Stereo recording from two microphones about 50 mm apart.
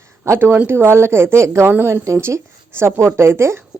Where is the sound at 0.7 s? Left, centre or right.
Right.